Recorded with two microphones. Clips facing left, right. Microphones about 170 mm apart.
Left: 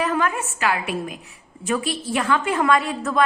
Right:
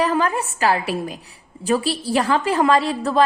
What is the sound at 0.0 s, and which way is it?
A woman's voice, 35° right (ahead or behind).